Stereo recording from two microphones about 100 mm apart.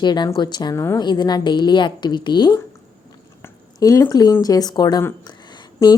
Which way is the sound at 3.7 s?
35° left (ahead or behind).